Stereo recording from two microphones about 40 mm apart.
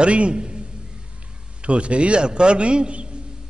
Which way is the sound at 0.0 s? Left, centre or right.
Right.